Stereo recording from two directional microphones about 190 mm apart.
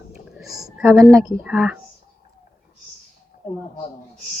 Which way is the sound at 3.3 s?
45° left (ahead or behind).